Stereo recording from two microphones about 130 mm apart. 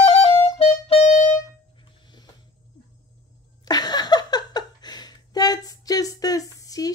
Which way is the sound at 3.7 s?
30° left (ahead or behind).